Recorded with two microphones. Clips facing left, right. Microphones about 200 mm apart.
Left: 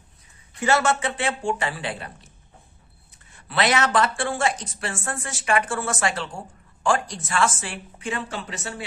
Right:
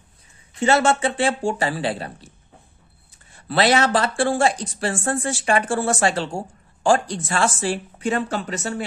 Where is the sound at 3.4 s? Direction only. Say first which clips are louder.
Right 4 dB; 35° right (ahead or behind).